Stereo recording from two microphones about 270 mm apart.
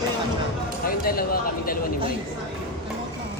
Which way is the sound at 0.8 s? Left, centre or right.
Left.